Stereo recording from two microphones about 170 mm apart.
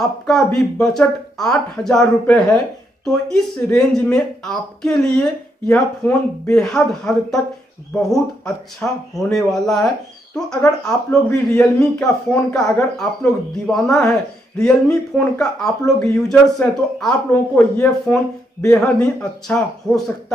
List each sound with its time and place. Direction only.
0.0 s speech: centre (ahead or behind)